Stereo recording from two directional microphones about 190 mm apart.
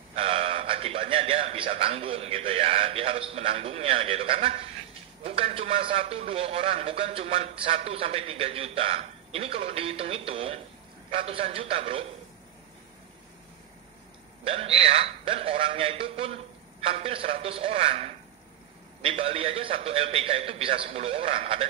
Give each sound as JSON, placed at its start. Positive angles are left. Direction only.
{"t": 0.1, "sound": "a man's voice", "side_deg": -30}
{"t": 14.4, "sound": "a man's voice", "side_deg": -30}